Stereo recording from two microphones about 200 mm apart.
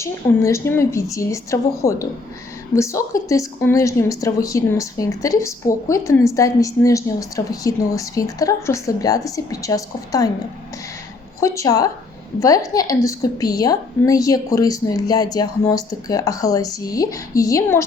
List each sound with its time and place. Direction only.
0.0 s a woman's voice: 15° left (ahead or behind)
11.3 s a woman's voice: 15° left (ahead or behind)